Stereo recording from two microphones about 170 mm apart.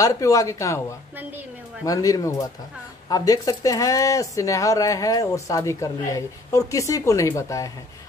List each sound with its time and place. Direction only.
0.0 s speech: 20° left (ahead or behind)